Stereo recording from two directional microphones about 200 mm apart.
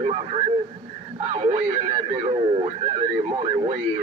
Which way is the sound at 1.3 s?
30° right (ahead or behind).